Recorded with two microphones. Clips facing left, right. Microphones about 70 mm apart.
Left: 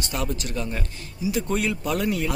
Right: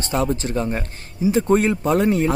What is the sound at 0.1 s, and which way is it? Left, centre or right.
A man's voice, right.